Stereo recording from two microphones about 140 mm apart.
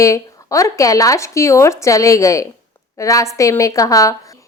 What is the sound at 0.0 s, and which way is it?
A woman's voice, 20° left (ahead or behind).